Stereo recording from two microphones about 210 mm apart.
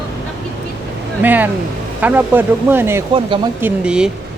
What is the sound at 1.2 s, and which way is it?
Speech, 10° right (ahead or behind).